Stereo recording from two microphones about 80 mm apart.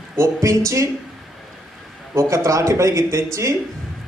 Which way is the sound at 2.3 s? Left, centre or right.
Right.